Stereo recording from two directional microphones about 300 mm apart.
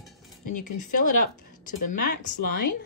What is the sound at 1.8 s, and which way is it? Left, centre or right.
Speech, left.